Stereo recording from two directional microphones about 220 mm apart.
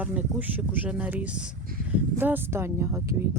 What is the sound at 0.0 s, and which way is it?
Speech, 5° right (ahead or behind).